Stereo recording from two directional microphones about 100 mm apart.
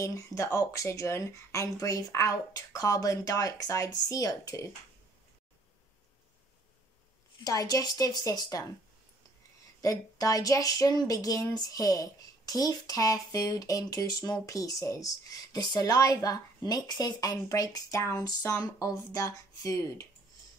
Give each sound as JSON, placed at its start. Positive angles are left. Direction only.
{"t": 0.0, "sound": "speech", "side_deg": 35}
{"t": 7.4, "sound": "speech", "side_deg": 35}
{"t": 9.8, "sound": "speech", "side_deg": 35}